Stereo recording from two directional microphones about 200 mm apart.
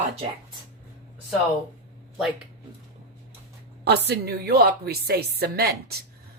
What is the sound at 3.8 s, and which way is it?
A woman's voice, 55° right (ahead or behind).